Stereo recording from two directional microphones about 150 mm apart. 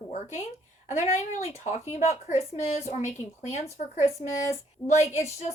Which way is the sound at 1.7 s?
50° left (ahead or behind).